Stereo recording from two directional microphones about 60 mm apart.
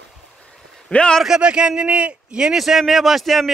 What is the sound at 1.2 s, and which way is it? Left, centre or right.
A man's voice, centre.